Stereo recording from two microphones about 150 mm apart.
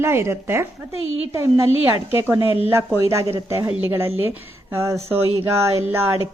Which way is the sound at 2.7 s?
15° right (ahead or behind).